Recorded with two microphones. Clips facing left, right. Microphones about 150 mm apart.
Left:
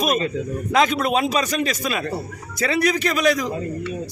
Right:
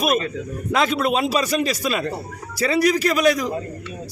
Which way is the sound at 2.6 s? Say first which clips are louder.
Right 2 dB; 35° right (ahead or behind).